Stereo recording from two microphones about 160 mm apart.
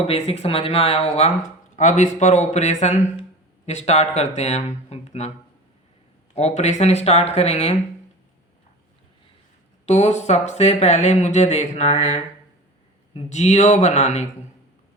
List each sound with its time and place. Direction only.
0.0 s speech: 40° left (ahead or behind)
1.7 s speech: 50° left (ahead or behind)
6.3 s speech: 45° left (ahead or behind)
9.8 s speech: 45° left (ahead or behind)